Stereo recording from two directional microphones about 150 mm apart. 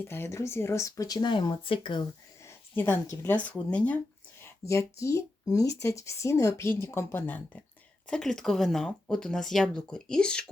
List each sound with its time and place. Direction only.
0.0 s speech: 15° left (ahead or behind); by 2.0 s 35° left (ahead or behind)
2.4 s speech: 15° left (ahead or behind)